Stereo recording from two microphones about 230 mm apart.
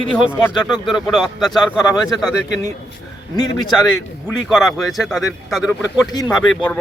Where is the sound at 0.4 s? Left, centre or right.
Centre.